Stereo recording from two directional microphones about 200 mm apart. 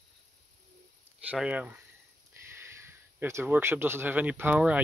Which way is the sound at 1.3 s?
5° right (ahead or behind).